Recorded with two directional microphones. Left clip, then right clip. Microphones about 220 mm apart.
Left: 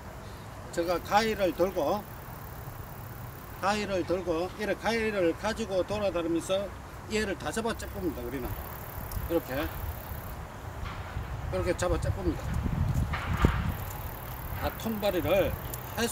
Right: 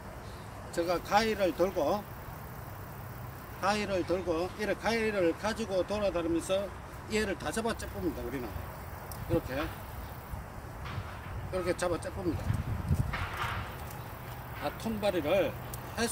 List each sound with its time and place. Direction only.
0.7 s speech: centre (ahead or behind)
3.6 s speech: centre (ahead or behind)
9.3 s speech: centre (ahead or behind)
11.5 s speech: centre (ahead or behind)
13.1 s a sound: 40° right (ahead or behind)
14.6 s speech: centre (ahead or behind)